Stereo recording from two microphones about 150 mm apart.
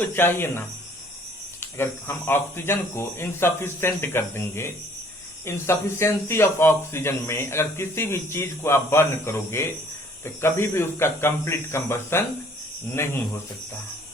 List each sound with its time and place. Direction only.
0.0 s speech: 15° left (ahead or behind)
1.8 s speech: 15° left (ahead or behind)